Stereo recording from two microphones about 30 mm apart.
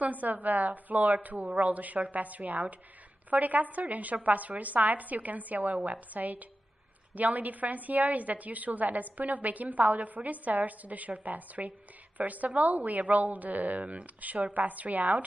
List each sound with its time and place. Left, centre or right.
0.0 s a woman's voice: right